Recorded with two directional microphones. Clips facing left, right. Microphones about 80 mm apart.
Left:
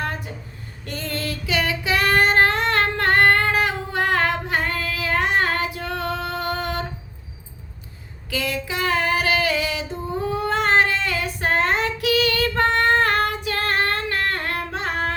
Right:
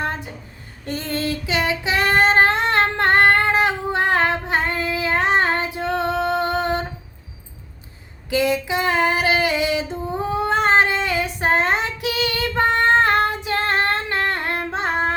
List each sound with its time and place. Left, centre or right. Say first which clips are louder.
0.9 s female singing: right 4 dB; right
8.3 s female singing: right 6 dB; right
10.4 s child singing: right 2 dB; right